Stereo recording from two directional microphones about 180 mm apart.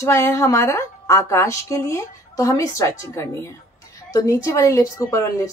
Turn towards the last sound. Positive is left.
turn(degrees=15)  # may be behind; listen again after turning